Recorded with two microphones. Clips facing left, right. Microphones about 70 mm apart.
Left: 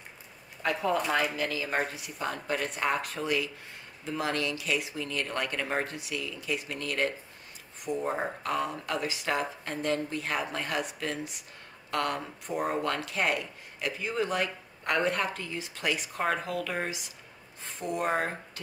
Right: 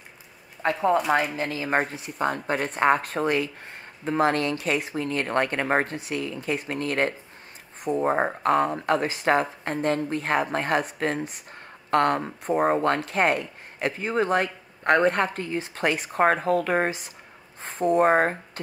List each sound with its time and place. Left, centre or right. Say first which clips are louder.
0.6 s speech: right 6 dB; right